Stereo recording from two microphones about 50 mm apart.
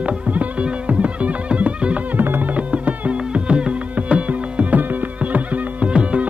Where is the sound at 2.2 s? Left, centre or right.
Right.